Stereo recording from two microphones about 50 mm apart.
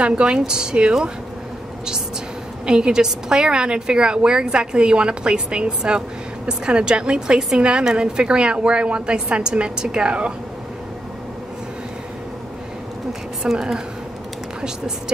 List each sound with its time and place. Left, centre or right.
0.0 s a woman's voice: centre
2.6 s a woman's voice: centre
13.4 s a woman's voice: centre